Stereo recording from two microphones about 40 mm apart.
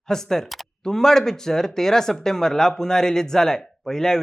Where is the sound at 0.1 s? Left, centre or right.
Centre.